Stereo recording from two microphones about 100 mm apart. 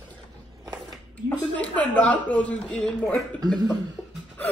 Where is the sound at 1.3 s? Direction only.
10° left (ahead or behind).